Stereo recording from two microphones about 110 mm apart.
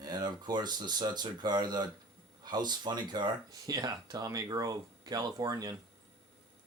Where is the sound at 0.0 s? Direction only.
40° right (ahead or behind).